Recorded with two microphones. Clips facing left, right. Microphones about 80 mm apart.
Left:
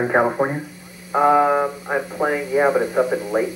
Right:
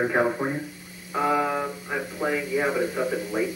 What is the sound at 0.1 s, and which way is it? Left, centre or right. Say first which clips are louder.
Speech: left 5 dB; left.